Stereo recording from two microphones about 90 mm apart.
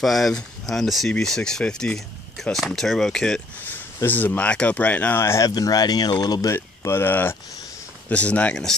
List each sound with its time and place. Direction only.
0.0 s speech: centre (ahead or behind)
3.6 s speech: 20° left (ahead or behind)
5.5 s speech: 45° left (ahead or behind)
6.5 s speech: 30° left (ahead or behind); by 8.7 s 10° left (ahead or behind)